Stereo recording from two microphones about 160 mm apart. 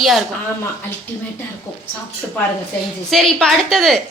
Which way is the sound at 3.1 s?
5° left (ahead or behind).